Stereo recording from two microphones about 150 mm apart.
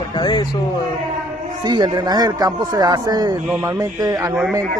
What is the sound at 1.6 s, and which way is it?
Speech, 30° right (ahead or behind).